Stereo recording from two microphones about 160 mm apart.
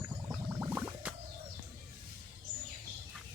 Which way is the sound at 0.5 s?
10° right (ahead or behind).